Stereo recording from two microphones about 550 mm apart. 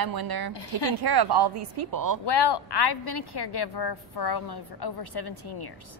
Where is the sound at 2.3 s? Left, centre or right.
Left.